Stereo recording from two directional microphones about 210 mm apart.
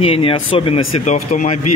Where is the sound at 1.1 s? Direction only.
35° left (ahead or behind).